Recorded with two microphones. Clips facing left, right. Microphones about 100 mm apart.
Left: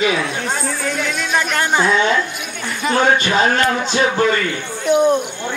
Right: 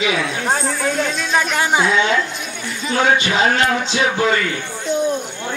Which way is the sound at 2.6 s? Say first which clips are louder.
Left 5 dB; 60° left (ahead or behind).